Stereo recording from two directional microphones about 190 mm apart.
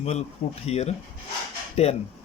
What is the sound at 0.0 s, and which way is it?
Speech, 35° left (ahead or behind).